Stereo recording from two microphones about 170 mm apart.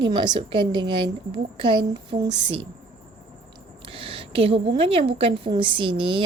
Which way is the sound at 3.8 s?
35° right (ahead or behind).